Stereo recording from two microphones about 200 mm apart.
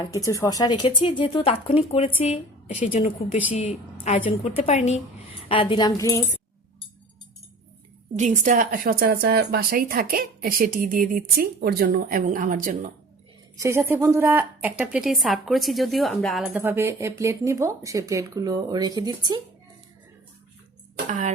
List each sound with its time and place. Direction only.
0.0 s a woman's voice: 15° left (ahead or behind)
8.2 s a woman's voice: 40° right (ahead or behind)
13.6 s a woman's voice: 15° right (ahead or behind)
21.1 s speech: 35° right (ahead or behind)